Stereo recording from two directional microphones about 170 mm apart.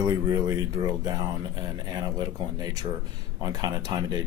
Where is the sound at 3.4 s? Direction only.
25° right (ahead or behind).